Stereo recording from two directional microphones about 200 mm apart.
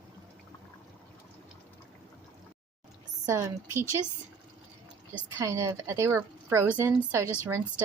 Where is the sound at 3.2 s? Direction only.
15° right (ahead or behind).